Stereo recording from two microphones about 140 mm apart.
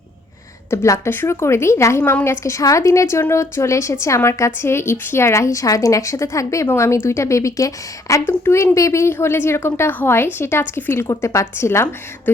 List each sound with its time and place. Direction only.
0.7 s a woman's voice: 20° left (ahead or behind)